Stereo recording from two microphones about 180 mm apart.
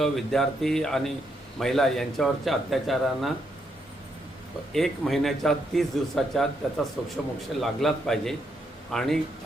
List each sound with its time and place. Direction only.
0.0 s a man's voice: centre (ahead or behind)
4.7 s a man's voice: centre (ahead or behind)